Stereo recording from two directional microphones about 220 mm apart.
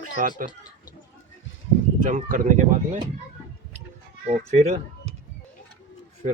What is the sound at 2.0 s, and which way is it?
Speech, 35° right (ahead or behind).